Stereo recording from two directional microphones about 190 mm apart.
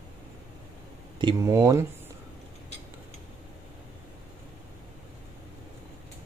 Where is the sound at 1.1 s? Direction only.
20° right (ahead or behind).